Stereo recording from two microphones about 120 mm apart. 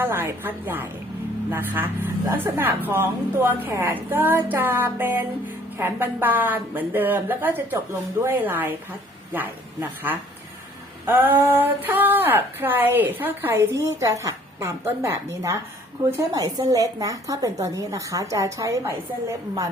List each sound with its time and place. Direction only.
0.0 s a woman's voice: 20° right (ahead or behind)